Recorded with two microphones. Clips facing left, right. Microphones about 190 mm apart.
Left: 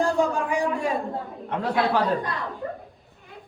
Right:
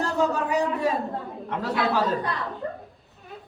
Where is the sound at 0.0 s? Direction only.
10° left (ahead or behind).